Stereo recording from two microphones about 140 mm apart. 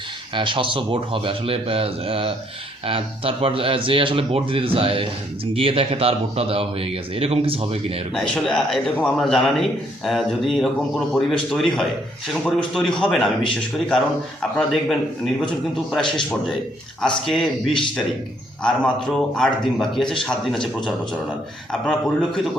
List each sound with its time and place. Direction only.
0.3 s speech: 35° right (ahead or behind)
8.1 s a man's voice: 5° left (ahead or behind)
17.0 s a man's voice: centre (ahead or behind)